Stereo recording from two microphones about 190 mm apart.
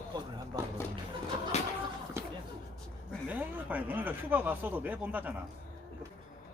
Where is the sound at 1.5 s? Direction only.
35° left (ahead or behind).